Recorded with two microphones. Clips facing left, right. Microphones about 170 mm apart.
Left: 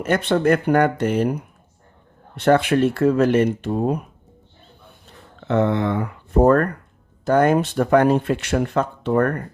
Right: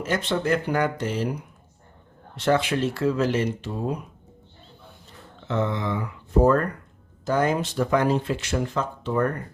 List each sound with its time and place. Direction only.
0.0 s speech: 60° left (ahead or behind)
5.4 s speech: 60° left (ahead or behind)